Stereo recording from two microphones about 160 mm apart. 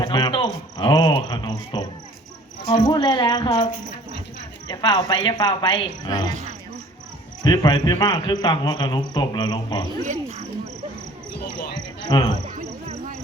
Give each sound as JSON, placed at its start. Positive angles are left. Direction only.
{"t": 0.0, "sound": "speech", "side_deg": 30}
{"t": 4.7, "sound": "speech", "side_deg": 25}
{"t": 7.4, "sound": "speech", "side_deg": 25}
{"t": 10.0, "sound": "speech", "side_deg": -45}
{"t": 12.0, "sound": "speech", "side_deg": 25}